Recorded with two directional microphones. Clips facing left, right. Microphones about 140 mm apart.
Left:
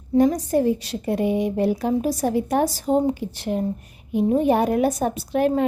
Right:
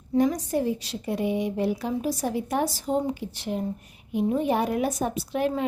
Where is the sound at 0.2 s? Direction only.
40° left (ahead or behind).